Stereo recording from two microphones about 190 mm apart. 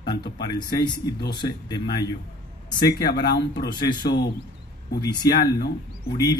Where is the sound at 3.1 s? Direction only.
60° left (ahead or behind).